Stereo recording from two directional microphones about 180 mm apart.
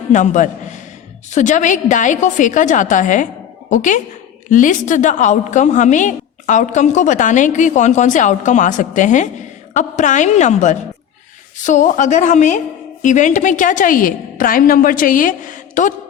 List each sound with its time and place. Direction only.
0.1 s a woman's voice: 45° left (ahead or behind)